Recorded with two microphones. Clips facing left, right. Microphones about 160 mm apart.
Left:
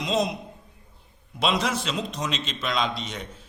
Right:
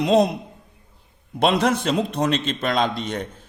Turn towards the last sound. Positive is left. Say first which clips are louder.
# right 6 dB
turn(degrees=-55)  # may be behind; listen again after turning